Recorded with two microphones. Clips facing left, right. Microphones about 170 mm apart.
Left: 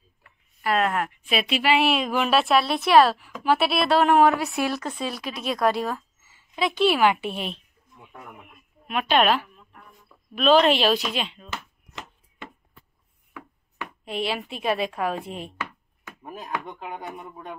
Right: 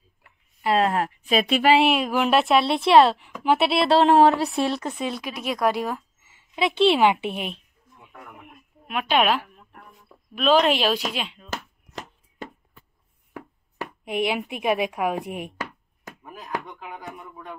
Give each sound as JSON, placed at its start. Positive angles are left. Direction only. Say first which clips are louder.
{"t": 0.6, "sound": "speech", "louder": "right 2 dB", "side_deg": -25}
{"t": 2.0, "sound": "a woman's voice", "louder": "right 2 dB", "side_deg": -10}
{"t": 8.8, "sound": "speech", "louder": "left 1 dB", "side_deg": -5}
{"t": 9.4, "sound": "a sound", "louder": "right 1 dB", "side_deg": -45}
{"t": 10.3, "sound": "speech", "louder": "left 1 dB", "side_deg": -5}
{"t": 11.5, "sound": "chopping", "louder": "right 3 dB", "side_deg": -40}
{"t": 14.0, "sound": "speech", "louder": "right 3 dB", "side_deg": -15}
{"t": 15.5, "sound": "a sound", "louder": "right 1 dB", "side_deg": -40}
{"t": 16.2, "sound": "speech", "louder": "even", "side_deg": 30}